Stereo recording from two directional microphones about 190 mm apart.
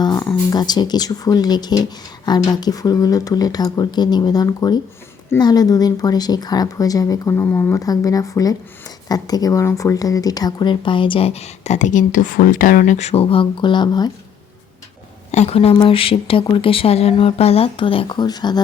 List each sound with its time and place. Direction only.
0.0 s a sound: 20° left (ahead or behind)
0.5 s speech: 20° left (ahead or behind)
15.3 s speech: 35° left (ahead or behind)